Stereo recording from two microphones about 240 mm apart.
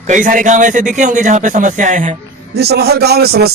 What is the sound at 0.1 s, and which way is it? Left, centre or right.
Speech, right.